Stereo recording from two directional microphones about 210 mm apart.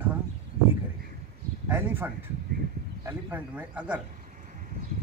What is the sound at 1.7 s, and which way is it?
Speech, 10° right (ahead or behind).